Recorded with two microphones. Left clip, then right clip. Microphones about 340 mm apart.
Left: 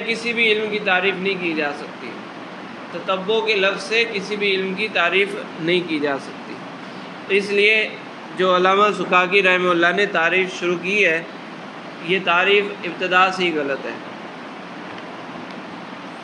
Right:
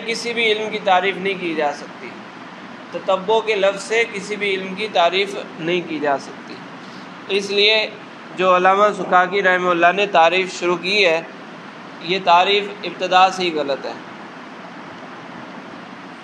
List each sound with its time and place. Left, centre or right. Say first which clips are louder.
0.0 s a man's voice: left 1 dB; centre
3.1 s a man's voice: right 2 dB; centre
7.2 s a man's voice: even; centre